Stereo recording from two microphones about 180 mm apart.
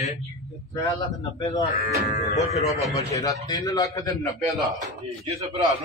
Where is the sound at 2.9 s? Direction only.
20° left (ahead or behind).